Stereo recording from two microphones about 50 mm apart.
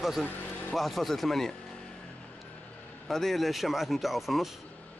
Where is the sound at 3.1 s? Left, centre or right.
Centre.